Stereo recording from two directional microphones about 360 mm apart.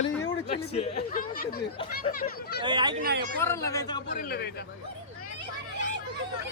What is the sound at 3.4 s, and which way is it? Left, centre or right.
Speech, centre.